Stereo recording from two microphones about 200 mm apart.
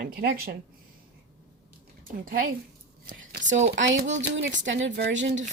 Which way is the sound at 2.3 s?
45° right (ahead or behind).